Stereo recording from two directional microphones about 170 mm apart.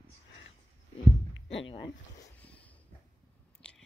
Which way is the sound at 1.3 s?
90° left.